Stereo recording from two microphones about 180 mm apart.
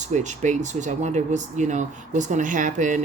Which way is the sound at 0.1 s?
40° right (ahead or behind).